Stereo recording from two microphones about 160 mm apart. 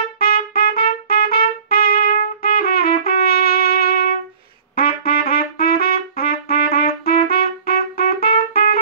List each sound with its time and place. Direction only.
0.2 s trumpet: 70° left (ahead or behind)